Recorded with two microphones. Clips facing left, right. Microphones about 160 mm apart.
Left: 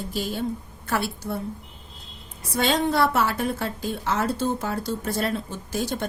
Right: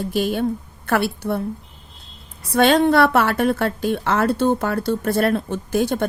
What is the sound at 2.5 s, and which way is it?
A woman's voice, 60° right (ahead or behind).